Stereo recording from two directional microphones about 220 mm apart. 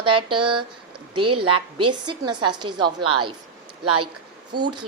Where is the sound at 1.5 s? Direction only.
90° right.